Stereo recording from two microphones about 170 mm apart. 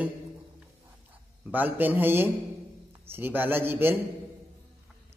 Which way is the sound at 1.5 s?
10° right (ahead or behind).